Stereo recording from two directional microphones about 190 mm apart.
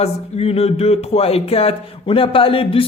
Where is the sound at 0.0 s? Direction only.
30° left (ahead or behind).